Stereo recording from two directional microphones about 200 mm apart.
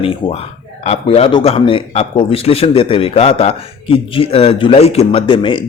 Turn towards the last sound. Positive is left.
turn(degrees=25)  # may be behind; listen again after turning